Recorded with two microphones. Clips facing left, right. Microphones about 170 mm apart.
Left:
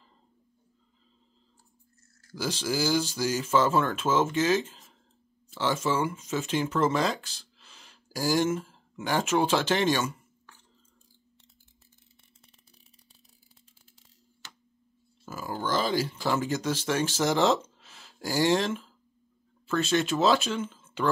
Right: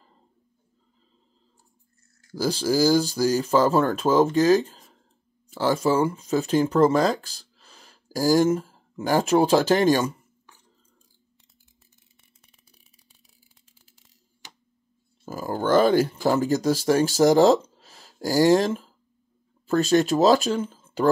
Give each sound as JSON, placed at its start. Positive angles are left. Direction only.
{"t": 2.3, "sound": "speech", "side_deg": -35}
{"t": 14.4, "sound": "a sound", "side_deg": -15}
{"t": 15.2, "sound": "speech", "side_deg": -40}